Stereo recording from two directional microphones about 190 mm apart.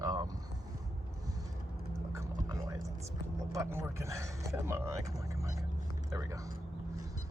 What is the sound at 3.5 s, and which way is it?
Speech, 15° right (ahead or behind).